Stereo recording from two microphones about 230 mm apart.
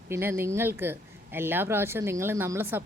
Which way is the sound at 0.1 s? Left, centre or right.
Centre.